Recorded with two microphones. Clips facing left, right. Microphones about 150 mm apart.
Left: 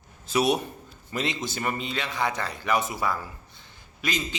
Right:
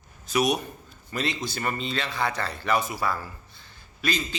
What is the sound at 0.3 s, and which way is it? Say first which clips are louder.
A man's voice: left 1 dB; 25° left (ahead or behind).